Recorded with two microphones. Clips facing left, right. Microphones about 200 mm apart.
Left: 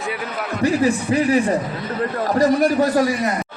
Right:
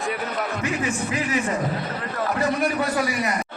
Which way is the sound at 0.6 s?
35° left (ahead or behind).